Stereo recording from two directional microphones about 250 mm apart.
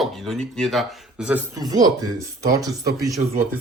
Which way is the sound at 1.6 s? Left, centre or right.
Centre.